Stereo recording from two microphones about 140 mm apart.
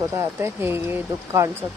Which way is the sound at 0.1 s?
15° right (ahead or behind).